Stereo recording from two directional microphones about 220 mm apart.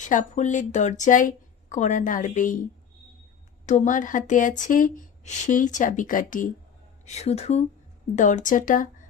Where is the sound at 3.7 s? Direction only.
35° left (ahead or behind).